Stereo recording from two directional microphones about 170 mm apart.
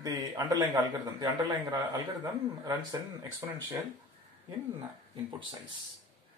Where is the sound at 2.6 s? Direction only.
20° right (ahead or behind).